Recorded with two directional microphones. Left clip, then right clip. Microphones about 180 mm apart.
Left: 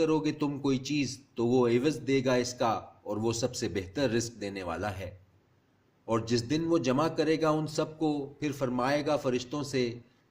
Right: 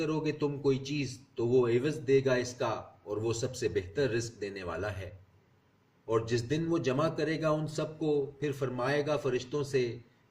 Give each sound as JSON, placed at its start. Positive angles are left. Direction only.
{"t": 0.0, "sound": "a man's voice", "side_deg": 50}
{"t": 6.1, "sound": "a man's voice", "side_deg": 50}